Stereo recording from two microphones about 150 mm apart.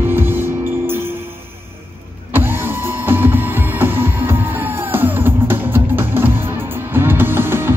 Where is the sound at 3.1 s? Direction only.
15° right (ahead or behind).